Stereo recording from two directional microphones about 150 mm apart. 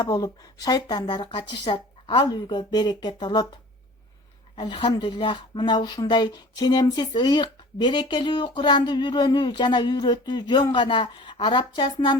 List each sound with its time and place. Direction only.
0.0 s speech: 25° left (ahead or behind)
4.5 s speech: 30° left (ahead or behind)